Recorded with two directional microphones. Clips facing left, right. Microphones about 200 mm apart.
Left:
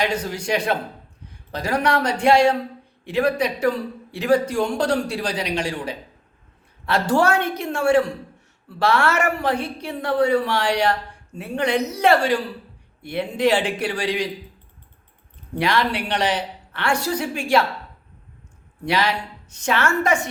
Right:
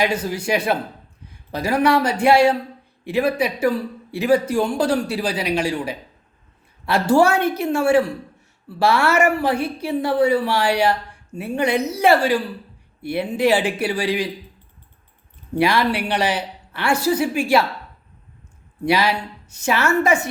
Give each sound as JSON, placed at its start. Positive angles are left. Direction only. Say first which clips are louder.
{"t": 0.0, "sound": "a woman's voice", "louder": "right 2 dB", "side_deg": -5}
{"t": 15.5, "sound": "a woman's voice", "louder": "right 3 dB", "side_deg": -10}
{"t": 18.9, "sound": "a woman's voice", "louder": "right 3 dB", "side_deg": -10}